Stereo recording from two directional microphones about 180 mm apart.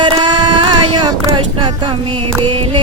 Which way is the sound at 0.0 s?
25° right (ahead or behind).